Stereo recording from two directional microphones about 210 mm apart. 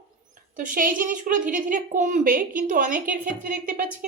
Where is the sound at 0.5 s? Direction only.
40° right (ahead or behind).